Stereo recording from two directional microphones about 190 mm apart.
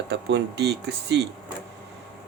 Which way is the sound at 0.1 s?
60° right (ahead or behind).